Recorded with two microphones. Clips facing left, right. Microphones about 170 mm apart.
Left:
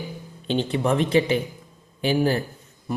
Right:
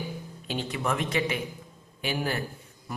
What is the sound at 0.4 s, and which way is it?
Speech, 30° left (ahead or behind).